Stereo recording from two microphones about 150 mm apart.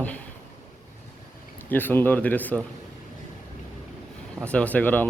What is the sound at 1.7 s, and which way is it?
Speech, 15° left (ahead or behind).